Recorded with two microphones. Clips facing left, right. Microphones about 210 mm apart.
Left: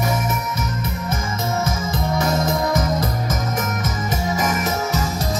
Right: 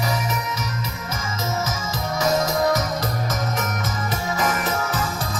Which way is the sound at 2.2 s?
55° left (ahead or behind).